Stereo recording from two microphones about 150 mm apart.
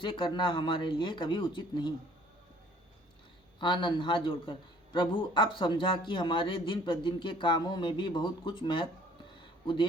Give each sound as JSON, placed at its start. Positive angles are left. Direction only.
{"t": 0.0, "sound": "a man's voice", "side_deg": 30}
{"t": 3.6, "sound": "a man's voice", "side_deg": 30}